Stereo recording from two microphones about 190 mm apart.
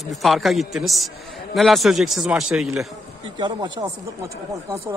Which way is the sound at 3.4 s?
20° right (ahead or behind).